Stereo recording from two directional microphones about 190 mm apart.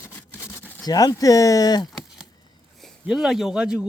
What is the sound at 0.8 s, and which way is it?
A man's voice, 20° left (ahead or behind).